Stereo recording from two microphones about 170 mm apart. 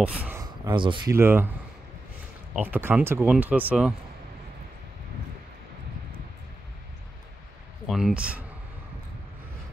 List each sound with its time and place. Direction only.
0.0 s speech: 10° right (ahead or behind)
0.4 s speech: 25° right (ahead or behind)
1.1 s speech: 15° right (ahead or behind)
2.5 s speech: 10° right (ahead or behind)
7.9 s speech: 5° right (ahead or behind)